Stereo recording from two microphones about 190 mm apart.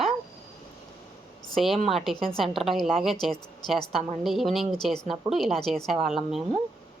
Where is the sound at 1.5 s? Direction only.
Centre (ahead or behind).